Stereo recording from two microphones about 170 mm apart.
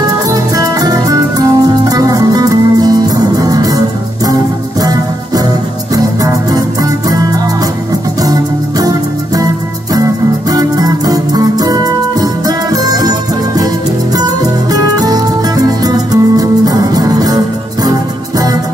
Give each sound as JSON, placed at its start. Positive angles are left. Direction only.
{"t": 0.3, "sound": "music", "side_deg": -20}
{"t": 10.5, "sound": "music", "side_deg": -20}
{"t": 14.7, "sound": "music", "side_deg": -20}